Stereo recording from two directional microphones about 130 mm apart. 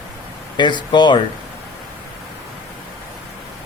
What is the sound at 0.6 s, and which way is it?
Speech, 35° left (ahead or behind).